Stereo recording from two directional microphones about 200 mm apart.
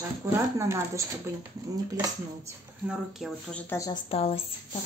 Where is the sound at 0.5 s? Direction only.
15° right (ahead or behind).